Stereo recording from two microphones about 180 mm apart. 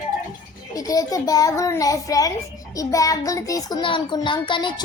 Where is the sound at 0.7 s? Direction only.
20° left (ahead or behind).